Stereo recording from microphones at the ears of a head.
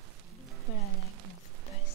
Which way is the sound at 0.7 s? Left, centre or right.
Left.